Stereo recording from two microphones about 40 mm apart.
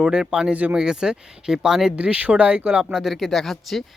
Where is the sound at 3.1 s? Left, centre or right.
Centre.